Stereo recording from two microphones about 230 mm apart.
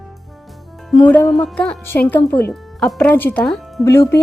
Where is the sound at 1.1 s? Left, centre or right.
Centre.